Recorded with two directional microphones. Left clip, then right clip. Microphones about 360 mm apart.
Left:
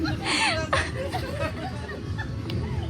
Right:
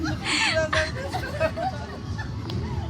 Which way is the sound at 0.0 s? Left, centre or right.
Centre.